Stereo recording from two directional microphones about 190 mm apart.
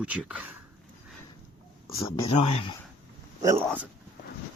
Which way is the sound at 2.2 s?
25° left (ahead or behind).